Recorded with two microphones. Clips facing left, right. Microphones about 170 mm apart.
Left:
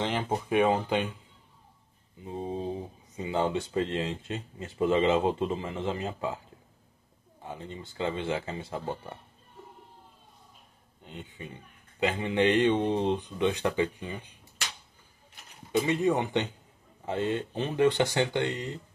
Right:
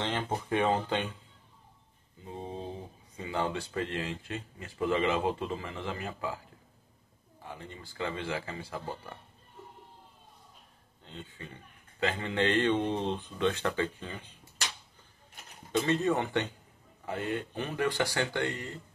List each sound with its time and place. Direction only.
0.0 s a man's voice: 20° left (ahead or behind)
2.2 s a man's voice: 15° left (ahead or behind)
7.4 s speech: 20° left (ahead or behind)
11.0 s a man's voice: 15° left (ahead or behind)
15.7 s a man's voice: 15° left (ahead or behind)